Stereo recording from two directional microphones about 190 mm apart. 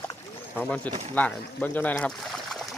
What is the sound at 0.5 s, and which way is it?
Speech, 5° left (ahead or behind).